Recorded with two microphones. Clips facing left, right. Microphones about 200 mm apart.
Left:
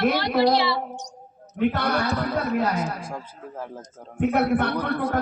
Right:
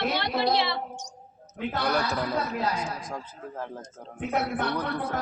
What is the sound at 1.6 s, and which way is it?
A woman's voice, 55° left (ahead or behind).